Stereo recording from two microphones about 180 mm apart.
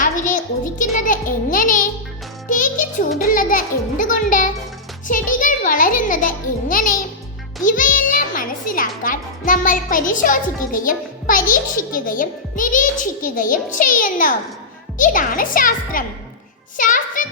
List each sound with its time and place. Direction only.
0.0 s a child's voice: 45° left (ahead or behind)
2.5 s music: 45° left (ahead or behind)
3.2 s a child's voice: 50° left (ahead or behind)